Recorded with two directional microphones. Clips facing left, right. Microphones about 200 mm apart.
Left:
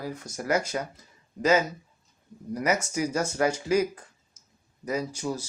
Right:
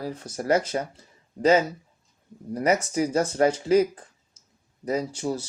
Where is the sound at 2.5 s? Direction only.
30° right (ahead or behind).